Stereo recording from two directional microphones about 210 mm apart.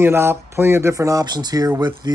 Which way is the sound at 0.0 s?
10° right (ahead or behind).